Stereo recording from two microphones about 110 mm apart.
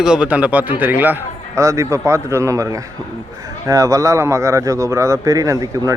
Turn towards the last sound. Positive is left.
turn(degrees=-30)  # may be behind; listen again after turning